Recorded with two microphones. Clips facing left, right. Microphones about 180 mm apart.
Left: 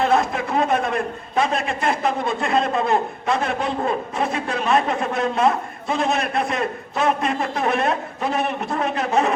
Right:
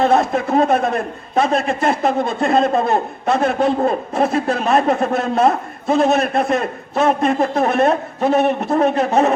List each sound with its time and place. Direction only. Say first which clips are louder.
0.0 s a man's voice: right 4 dB; 40° right (ahead or behind)